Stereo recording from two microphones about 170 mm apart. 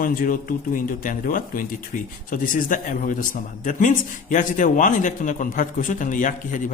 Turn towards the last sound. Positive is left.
turn(degrees=50)  # may be behind; listen again after turning